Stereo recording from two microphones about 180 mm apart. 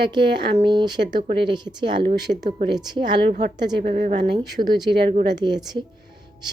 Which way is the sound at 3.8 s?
45° right (ahead or behind).